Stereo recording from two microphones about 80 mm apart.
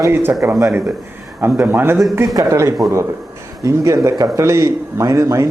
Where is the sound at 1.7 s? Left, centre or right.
Right.